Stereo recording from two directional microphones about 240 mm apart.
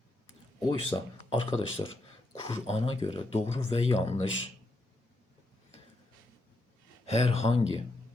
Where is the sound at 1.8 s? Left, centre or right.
Centre.